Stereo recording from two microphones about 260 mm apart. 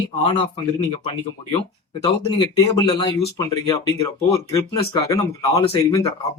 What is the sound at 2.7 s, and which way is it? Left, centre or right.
Speech, centre.